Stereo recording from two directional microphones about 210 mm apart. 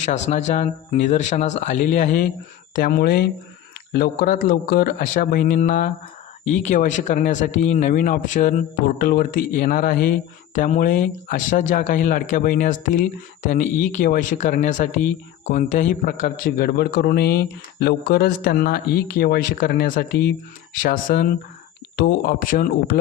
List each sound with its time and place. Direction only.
0.3 s speech: 35° left (ahead or behind)
2.7 s a man's voice: 45° left (ahead or behind)